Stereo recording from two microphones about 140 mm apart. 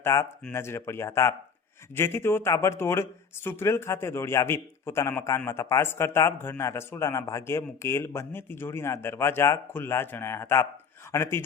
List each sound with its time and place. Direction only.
0.0 s a man's voice: 20° left (ahead or behind)